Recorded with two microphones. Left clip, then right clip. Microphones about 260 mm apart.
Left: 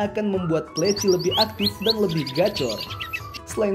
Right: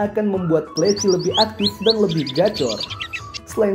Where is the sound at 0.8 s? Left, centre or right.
Centre.